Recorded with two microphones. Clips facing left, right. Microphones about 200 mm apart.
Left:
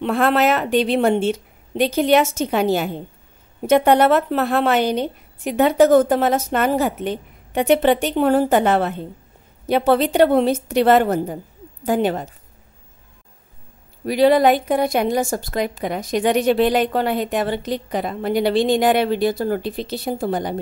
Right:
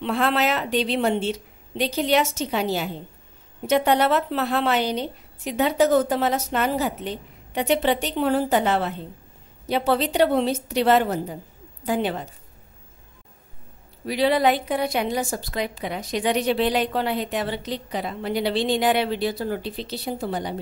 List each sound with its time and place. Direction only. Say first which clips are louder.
0.0 s a woman's voice: left 5 dB; 50° left (ahead or behind)
14.0 s a woman's voice: left 6 dB; 45° left (ahead or behind)